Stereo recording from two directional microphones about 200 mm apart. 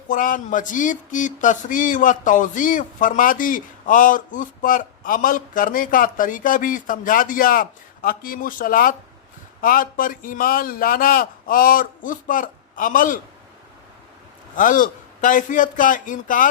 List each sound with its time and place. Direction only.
0.1 s speech: 40° left (ahead or behind)
14.5 s a man's voice: 40° left (ahead or behind)